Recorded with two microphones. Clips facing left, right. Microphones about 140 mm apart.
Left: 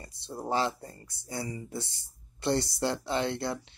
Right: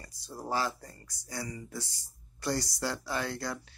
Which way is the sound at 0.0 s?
25° left (ahead or behind).